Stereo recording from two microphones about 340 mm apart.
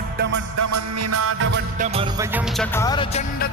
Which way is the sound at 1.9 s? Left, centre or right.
Centre.